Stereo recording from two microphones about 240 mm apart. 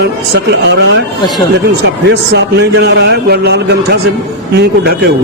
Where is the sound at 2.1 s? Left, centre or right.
Right.